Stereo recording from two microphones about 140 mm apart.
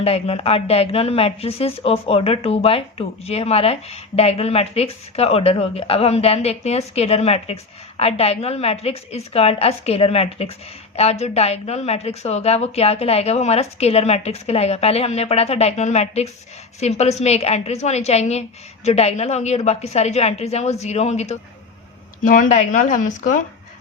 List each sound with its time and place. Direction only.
0.0 s speech: 45° left (ahead or behind)
22.2 s speech: 70° left (ahead or behind)